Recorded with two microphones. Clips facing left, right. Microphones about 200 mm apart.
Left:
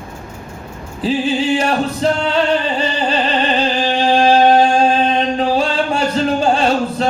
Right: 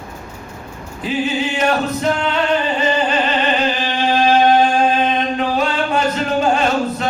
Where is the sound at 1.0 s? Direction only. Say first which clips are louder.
Left 3 dB; 30° left (ahead or behind).